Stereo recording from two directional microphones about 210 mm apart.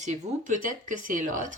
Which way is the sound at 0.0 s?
35° right (ahead or behind).